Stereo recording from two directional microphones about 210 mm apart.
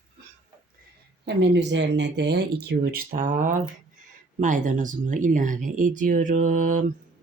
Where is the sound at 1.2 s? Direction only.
55° right (ahead or behind); by 6.9 s 35° right (ahead or behind).